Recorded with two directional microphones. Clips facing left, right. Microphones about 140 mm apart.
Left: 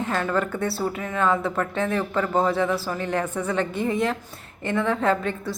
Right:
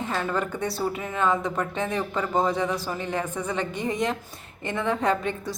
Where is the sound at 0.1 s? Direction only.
10° right (ahead or behind).